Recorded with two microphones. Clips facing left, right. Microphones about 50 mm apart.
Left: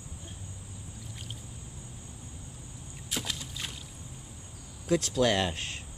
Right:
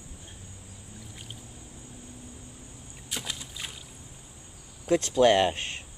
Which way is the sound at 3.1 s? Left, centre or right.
Centre.